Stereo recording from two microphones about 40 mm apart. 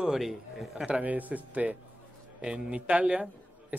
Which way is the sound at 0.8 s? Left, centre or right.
Right.